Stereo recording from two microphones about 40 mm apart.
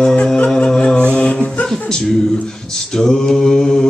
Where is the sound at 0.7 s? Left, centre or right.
Centre.